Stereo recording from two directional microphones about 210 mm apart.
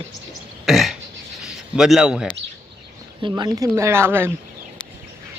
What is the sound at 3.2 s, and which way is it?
Speech, 20° right (ahead or behind).